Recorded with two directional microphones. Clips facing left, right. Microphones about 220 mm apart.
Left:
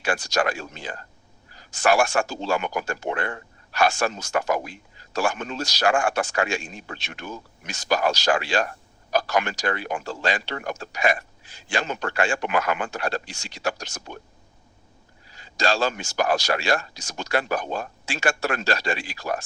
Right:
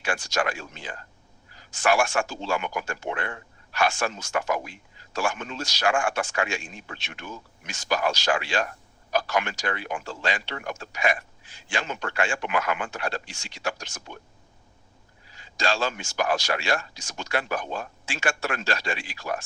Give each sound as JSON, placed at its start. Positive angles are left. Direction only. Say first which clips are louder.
{"t": 0.0, "sound": "speech", "louder": "left 3 dB", "side_deg": 40}
{"t": 15.3, "sound": "speech", "louder": "left 3 dB", "side_deg": 40}